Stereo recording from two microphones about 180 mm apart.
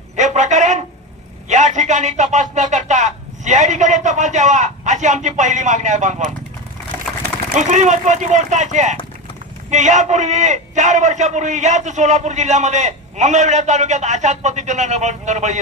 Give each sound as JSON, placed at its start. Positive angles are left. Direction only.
{"t": 0.1, "sound": "a sound", "side_deg": -40}
{"t": 1.5, "sound": "speech", "side_deg": -40}
{"t": 7.5, "sound": "a man's voice", "side_deg": -40}